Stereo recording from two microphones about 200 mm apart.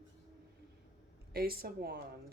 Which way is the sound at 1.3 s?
50° right (ahead or behind).